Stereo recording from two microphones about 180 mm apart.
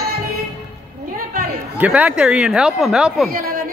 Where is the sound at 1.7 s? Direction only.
10° right (ahead or behind).